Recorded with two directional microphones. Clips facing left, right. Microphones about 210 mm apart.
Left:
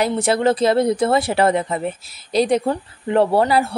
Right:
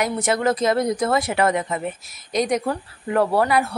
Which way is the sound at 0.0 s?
30° left (ahead or behind).